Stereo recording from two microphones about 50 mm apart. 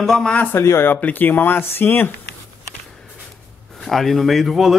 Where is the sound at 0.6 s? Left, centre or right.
Left.